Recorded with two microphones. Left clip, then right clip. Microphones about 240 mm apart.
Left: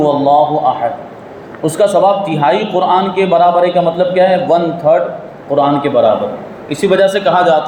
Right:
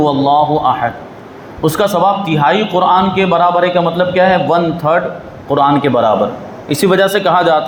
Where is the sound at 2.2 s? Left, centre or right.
Right.